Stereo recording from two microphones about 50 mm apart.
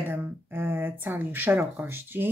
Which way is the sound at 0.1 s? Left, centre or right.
Right.